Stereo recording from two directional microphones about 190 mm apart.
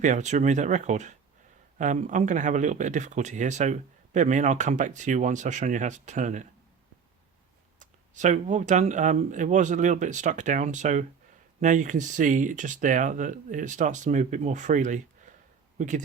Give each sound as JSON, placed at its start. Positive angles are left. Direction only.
{"t": 0.0, "sound": "speech", "side_deg": -40}
{"t": 7.8, "sound": "speech", "side_deg": -40}